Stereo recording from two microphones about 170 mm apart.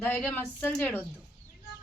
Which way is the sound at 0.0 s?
10° left (ahead or behind).